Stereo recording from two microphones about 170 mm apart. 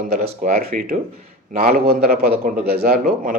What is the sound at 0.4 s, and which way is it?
A man's voice, 55° right (ahead or behind).